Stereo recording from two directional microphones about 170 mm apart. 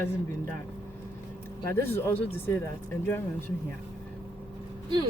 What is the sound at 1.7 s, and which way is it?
Speech, 15° left (ahead or behind).